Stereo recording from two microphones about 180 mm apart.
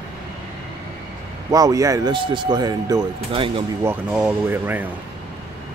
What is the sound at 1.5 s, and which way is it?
Speech, 20° right (ahead or behind).